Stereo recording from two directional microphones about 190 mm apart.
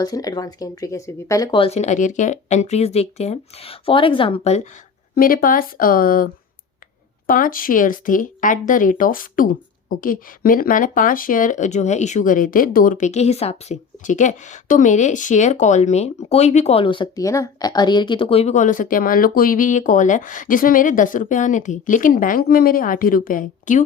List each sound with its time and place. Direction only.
0.0 s speech: 20° left (ahead or behind); by 4.7 s 35° left (ahead or behind)
5.1 s speech: 50° left (ahead or behind)
7.3 s speech: 50° left (ahead or behind)